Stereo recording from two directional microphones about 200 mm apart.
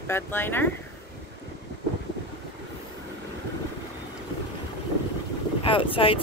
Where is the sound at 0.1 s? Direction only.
10° left (ahead or behind).